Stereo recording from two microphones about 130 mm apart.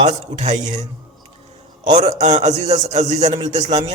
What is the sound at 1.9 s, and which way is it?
A man's voice, 60° right (ahead or behind).